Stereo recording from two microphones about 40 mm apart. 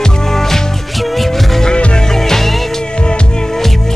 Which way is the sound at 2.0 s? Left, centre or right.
Centre.